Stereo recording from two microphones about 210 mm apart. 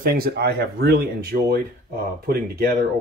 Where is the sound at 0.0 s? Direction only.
45° right (ahead or behind).